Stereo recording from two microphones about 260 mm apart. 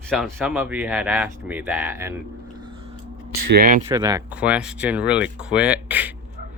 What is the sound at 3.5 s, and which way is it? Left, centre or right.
Speech, right.